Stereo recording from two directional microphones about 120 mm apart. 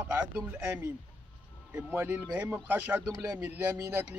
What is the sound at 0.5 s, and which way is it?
Speech, 15° right (ahead or behind).